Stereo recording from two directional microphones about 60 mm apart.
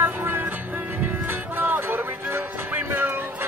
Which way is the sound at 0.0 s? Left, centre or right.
Right.